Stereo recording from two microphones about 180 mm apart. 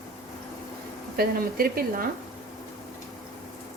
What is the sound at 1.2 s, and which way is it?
Speech, 55° right (ahead or behind).